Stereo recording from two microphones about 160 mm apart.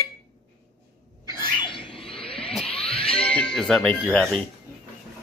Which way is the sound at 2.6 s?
35° left (ahead or behind).